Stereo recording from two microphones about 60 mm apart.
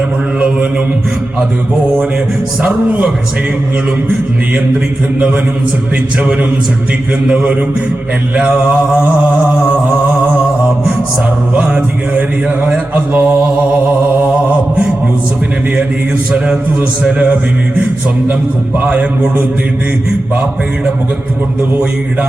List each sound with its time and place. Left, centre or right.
0.3 s mantra: right
2.6 s mantra: right
8.4 s mantra: centre
12.9 s mantra: right
17.0 s mantra: right
18.9 s a man's voice: centre